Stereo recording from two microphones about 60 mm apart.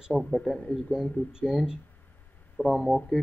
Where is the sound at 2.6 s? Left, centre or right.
Centre.